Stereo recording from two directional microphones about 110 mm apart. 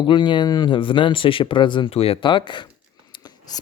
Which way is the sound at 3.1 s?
40° left (ahead or behind).